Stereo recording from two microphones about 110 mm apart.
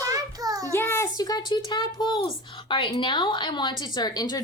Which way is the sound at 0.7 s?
25° left (ahead or behind).